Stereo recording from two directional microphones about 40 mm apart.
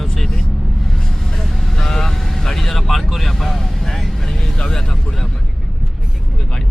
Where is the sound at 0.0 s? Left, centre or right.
Centre.